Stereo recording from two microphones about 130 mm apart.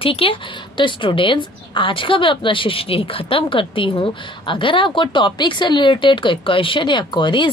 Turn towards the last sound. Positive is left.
turn(degrees=40)  # may be behind; listen again after turning